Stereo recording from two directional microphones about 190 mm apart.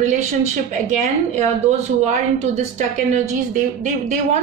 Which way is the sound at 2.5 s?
40° right (ahead or behind).